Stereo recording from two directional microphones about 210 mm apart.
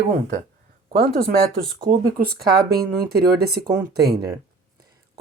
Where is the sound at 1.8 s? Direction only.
20° right (ahead or behind).